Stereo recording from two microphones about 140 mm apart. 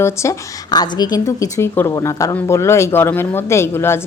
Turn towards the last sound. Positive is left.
turn(degrees=15)  # may be behind; listen again after turning